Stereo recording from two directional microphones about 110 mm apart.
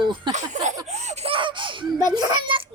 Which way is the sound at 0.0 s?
45° right (ahead or behind).